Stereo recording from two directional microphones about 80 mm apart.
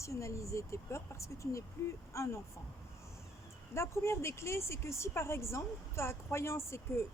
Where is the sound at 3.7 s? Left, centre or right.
Left.